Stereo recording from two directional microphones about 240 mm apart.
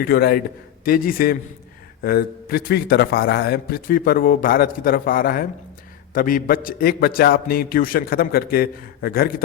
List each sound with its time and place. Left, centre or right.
0.0 s a man's voice: left